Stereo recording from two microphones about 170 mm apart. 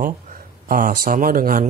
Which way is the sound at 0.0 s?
55° right (ahead or behind).